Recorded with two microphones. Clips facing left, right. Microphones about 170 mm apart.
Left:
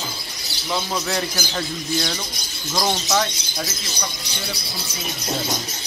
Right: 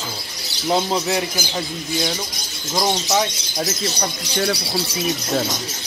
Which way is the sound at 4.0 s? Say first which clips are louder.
Right 8 dB; 75° right (ahead or behind).